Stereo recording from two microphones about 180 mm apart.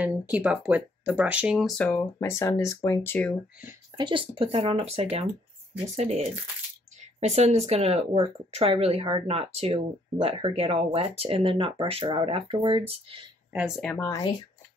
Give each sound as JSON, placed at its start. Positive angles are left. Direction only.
{"t": 0.0, "sound": "speech", "side_deg": -10}
{"t": 1.9, "sound": "speech", "side_deg": 15}
{"t": 3.9, "sound": "speech", "side_deg": -25}
{"t": 13.5, "sound": "speech", "side_deg": -5}
{"t": 13.8, "sound": "speech", "side_deg": 15}